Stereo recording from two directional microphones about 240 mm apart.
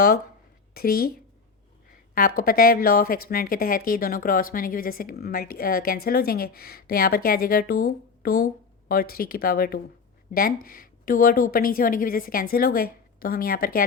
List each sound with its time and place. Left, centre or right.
0.7 s a woman's voice: left